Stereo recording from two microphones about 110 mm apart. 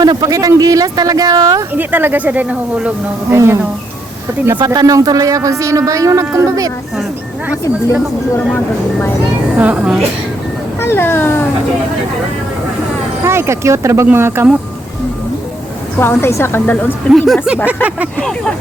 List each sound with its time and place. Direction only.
0.0 s speech: 35° right (ahead or behind)
1.7 s speech: 15° right (ahead or behind)
3.3 s speech: 25° right (ahead or behind)
4.5 s speech: 40° right (ahead or behind)
8.5 s speech: 15° left (ahead or behind)
9.6 s speech: 10° right (ahead or behind)
10.8 s a woman's voice: 20° left (ahead or behind)
13.2 s speech: 25° right (ahead or behind)
16.0 s a woman's voice: 20° left (ahead or behind)
17.1 s speech: centre (ahead or behind)